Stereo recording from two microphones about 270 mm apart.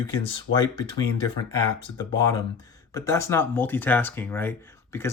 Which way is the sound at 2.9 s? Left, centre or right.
Centre.